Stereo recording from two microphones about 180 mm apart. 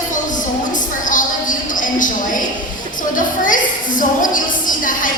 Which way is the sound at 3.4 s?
50° left (ahead or behind).